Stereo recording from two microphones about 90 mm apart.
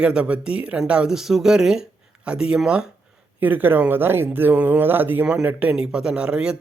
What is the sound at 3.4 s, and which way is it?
A man's voice, 20° right (ahead or behind).